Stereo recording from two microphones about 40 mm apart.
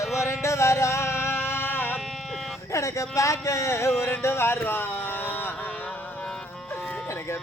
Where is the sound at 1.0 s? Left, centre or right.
Left.